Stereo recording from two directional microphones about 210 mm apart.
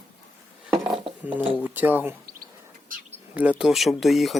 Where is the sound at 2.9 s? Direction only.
40° right (ahead or behind).